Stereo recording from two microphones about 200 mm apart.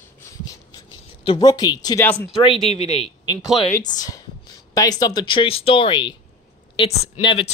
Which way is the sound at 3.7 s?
20° left (ahead or behind).